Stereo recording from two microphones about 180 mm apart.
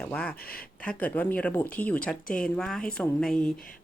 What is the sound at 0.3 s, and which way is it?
Speech, 55° left (ahead or behind).